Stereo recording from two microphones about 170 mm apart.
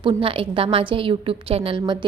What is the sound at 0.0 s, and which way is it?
A woman's voice, 30° right (ahead or behind).